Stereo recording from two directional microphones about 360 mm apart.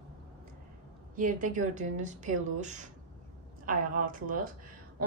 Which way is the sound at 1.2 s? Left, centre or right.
Right.